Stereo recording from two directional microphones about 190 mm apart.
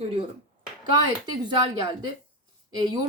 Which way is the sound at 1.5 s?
20° right (ahead or behind).